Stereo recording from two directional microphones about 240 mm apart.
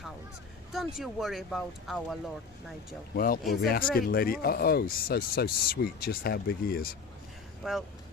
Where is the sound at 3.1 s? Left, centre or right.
Left.